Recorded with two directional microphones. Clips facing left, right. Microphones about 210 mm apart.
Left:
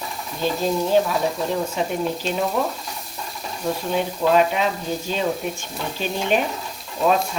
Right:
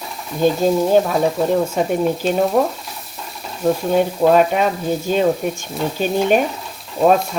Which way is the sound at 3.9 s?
50° right (ahead or behind).